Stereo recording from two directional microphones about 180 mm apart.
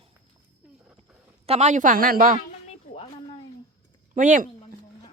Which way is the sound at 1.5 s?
40° right (ahead or behind).